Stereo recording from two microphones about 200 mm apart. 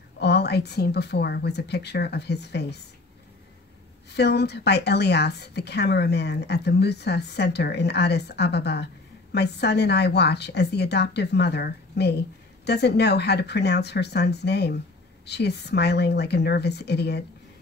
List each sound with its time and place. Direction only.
0.2 s a woman's voice: 55° left (ahead or behind)
4.1 s a woman's voice: 55° left (ahead or behind)